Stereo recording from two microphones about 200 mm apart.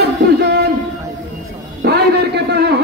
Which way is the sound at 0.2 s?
55° right (ahead or behind).